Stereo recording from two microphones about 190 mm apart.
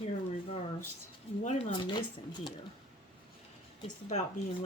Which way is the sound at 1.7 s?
25° left (ahead or behind).